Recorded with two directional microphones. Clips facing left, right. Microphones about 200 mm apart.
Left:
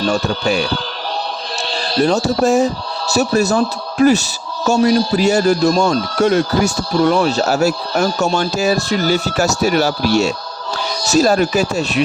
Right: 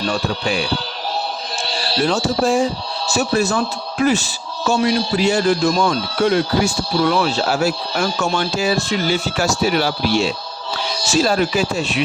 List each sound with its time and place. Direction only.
0.0 s speech: 45° left (ahead or behind)
2.0 s a man's voice: 40° left (ahead or behind)